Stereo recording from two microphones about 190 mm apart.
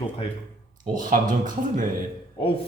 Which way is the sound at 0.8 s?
45° right (ahead or behind).